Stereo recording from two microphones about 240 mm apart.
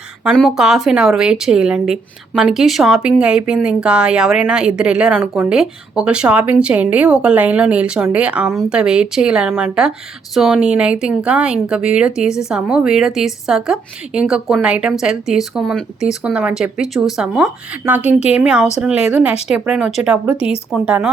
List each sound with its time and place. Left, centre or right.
0.3 s speech: centre
20.3 s a woman's voice: left
20.7 s speech: centre